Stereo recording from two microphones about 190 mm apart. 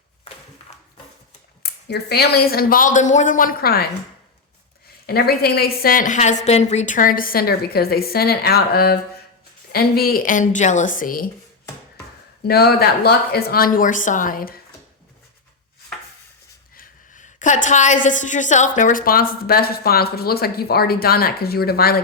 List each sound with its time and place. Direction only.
0.7 s a sound: 35° left (ahead or behind)
1.6 s a woman's voice: 55° left (ahead or behind)
5.0 s a woman's voice: 55° left (ahead or behind)
12.4 s a woman's voice: 55° left (ahead or behind)
16.7 s a woman's voice: 40° left (ahead or behind)